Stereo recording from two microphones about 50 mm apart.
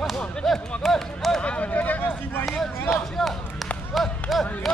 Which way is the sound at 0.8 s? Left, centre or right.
Centre.